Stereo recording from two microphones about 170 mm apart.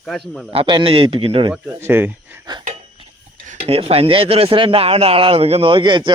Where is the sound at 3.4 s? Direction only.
35° right (ahead or behind).